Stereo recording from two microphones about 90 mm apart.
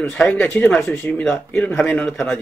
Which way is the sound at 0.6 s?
20° left (ahead or behind).